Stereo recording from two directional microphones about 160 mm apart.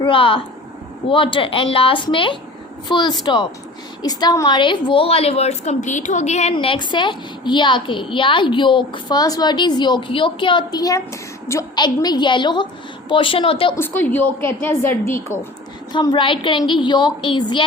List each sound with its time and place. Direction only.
0.0 s a woman's voice: 35° left (ahead or behind)
6.5 s a woman's voice: 35° left (ahead or behind)
13.7 s a woman's voice: 10° left (ahead or behind)
15.9 s a woman's voice: 30° left (ahead or behind)